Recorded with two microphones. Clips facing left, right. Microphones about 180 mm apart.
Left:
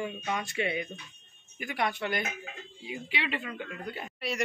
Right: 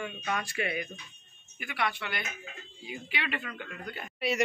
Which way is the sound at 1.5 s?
40° left (ahead or behind).